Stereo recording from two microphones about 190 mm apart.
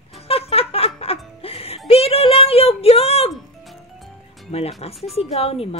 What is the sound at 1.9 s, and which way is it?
Speech, 30° left (ahead or behind).